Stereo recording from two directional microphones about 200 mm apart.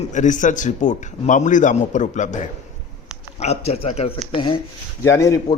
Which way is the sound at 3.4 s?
30° left (ahead or behind).